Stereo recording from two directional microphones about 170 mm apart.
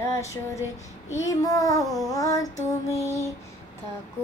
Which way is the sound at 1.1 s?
20° left (ahead or behind).